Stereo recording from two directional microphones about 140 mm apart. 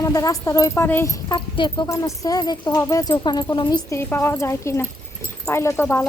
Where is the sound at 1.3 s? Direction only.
35° left (ahead or behind).